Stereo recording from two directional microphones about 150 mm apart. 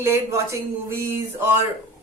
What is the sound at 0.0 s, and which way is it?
Speech, 20° right (ahead or behind).